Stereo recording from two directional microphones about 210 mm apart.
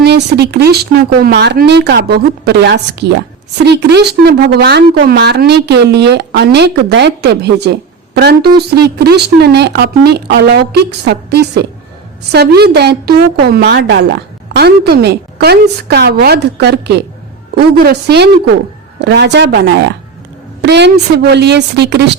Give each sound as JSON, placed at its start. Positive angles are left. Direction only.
{"t": 0.0, "sound": "a woman's voice", "side_deg": -50}